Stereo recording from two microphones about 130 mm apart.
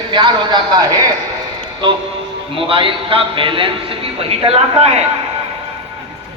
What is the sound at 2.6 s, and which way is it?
A man's voice, 45° right (ahead or behind).